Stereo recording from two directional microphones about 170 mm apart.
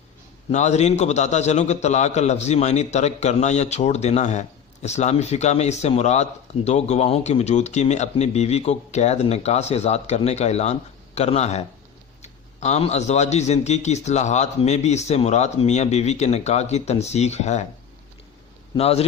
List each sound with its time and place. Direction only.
0.5 s a man's voice: 40° left (ahead or behind)
18.8 s a man's voice: 35° left (ahead or behind)